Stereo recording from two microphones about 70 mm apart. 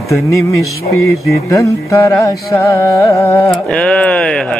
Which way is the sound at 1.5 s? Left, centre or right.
Left.